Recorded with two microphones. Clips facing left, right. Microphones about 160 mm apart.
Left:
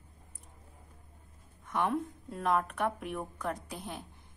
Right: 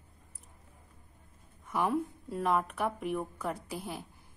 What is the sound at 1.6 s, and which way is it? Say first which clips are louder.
A woman's voice: right 1 dB; 5° right (ahead or behind).